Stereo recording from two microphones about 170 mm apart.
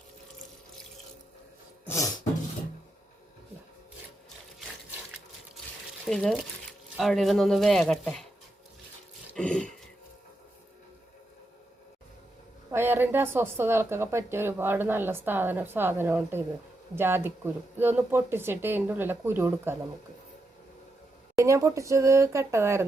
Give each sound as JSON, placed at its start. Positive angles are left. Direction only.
{"t": 6.1, "sound": "speech", "side_deg": 0}
{"t": 9.3, "sound": "a sound", "side_deg": 5}
{"t": 12.7, "sound": "a woman's voice", "side_deg": -15}
{"t": 21.3, "sound": "a woman's voice", "side_deg": -20}